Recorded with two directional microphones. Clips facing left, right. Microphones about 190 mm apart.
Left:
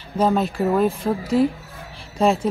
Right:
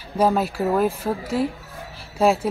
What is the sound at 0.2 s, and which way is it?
Speech, centre (ahead or behind).